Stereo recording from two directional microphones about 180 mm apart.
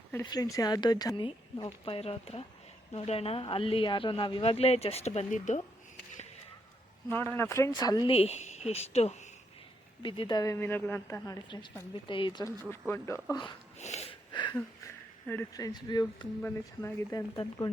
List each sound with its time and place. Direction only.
0.1 s speech: 20° left (ahead or behind); by 5.6 s 40° left (ahead or behind)
7.1 s a woman's voice: 10° left (ahead or behind)
8.1 s a woman's voice: 35° left (ahead or behind); by 11.3 s 15° left (ahead or behind)
11.4 s speech: 25° left (ahead or behind)
13.7 s a sound: 40° left (ahead or behind)
15.3 s a woman's voice: 15° left (ahead or behind)